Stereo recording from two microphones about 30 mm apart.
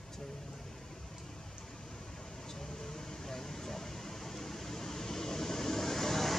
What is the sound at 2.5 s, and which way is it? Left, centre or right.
Vehicle, centre.